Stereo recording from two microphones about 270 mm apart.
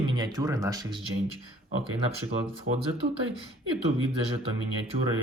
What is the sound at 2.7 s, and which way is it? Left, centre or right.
Speech, right.